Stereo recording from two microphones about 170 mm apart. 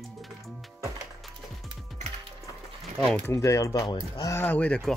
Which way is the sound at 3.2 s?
15° left (ahead or behind).